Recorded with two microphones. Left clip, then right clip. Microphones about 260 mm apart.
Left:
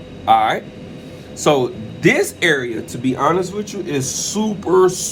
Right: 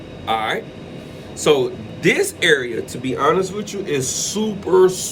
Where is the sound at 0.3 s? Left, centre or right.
Left.